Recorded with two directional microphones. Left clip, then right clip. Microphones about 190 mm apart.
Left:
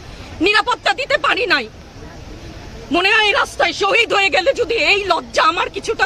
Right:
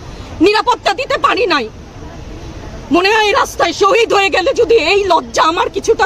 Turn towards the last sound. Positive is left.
turn(degrees=-15)  # may be behind; listen again after turning